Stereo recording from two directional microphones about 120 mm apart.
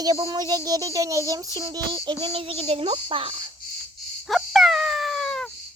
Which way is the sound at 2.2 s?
55° right (ahead or behind).